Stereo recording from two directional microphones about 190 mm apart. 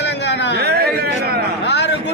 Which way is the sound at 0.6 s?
55° right (ahead or behind).